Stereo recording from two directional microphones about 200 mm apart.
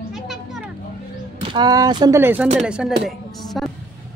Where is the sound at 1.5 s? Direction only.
20° right (ahead or behind); by 2.9 s 5° right (ahead or behind).